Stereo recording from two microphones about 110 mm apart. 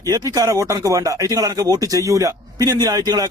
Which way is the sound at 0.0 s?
35° right (ahead or behind).